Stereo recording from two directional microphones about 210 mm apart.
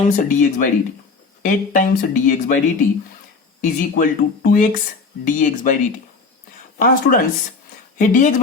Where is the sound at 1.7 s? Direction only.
40° left (ahead or behind).